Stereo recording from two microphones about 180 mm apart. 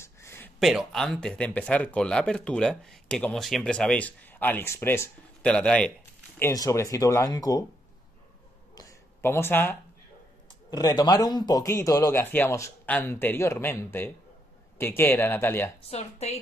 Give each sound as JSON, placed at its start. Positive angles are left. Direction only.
{"t": 0.0, "sound": "a sound", "side_deg": 15}
{"t": 0.6, "sound": "speech", "side_deg": 0}
{"t": 6.4, "sound": "speech", "side_deg": 20}
{"t": 8.7, "sound": "a sound", "side_deg": 15}
{"t": 10.5, "sound": "speech", "side_deg": 20}
{"t": 15.9, "sound": "speech", "side_deg": 35}